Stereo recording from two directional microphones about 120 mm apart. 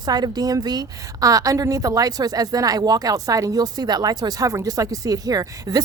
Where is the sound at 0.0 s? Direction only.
35° right (ahead or behind).